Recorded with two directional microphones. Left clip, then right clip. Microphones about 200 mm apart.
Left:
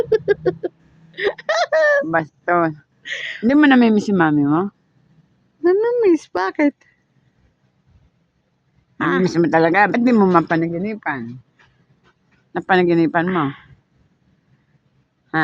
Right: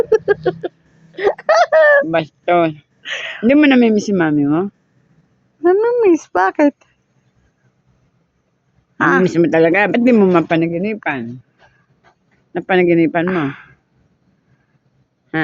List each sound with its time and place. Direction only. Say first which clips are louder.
0.0 s a sound: right 3 dB; 20° left (ahead or behind)
1.1 s hiccup: right 5 dB; centre (ahead or behind)
1.4 s a sound: right 6 dB; 10° left (ahead or behind)
5.6 s speech: right 3 dB; 15° left (ahead or behind)
9.0 s speech: right 5 dB; 10° left (ahead or behind)
10.6 s speech: right 4 dB; centre (ahead or behind)
12.5 s speech: right 2 dB; 20° left (ahead or behind)
13.2 s speech: right 2 dB; 5° left (ahead or behind)